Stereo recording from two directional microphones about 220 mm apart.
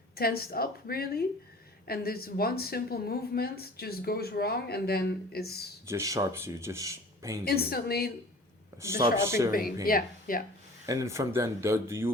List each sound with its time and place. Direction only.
0.2 s speech: 45° left (ahead or behind)
5.9 s speech: 15° right (ahead or behind)
7.4 s speech: 45° left (ahead or behind)
8.8 s speech: 10° right (ahead or behind)
9.5 s speech: 40° left (ahead or behind)
10.8 s speech: 15° right (ahead or behind)